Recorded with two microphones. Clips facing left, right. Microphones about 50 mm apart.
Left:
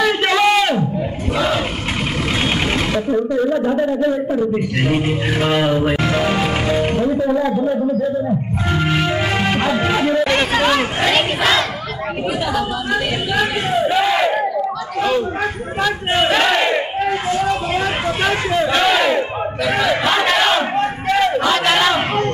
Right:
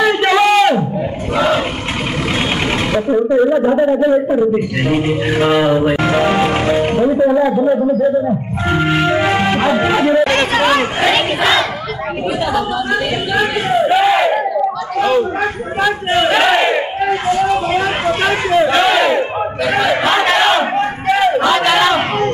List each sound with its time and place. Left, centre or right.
0.0 s a sound: centre
2.9 s a sound: centre
3.3 s a man's voice: right
4.8 s music: centre
13.3 s crowd: centre
16.1 s speech: centre
17.5 s music: centre
20.1 s battle cry: centre